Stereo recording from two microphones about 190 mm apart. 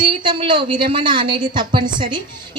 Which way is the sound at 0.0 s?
25° right (ahead or behind).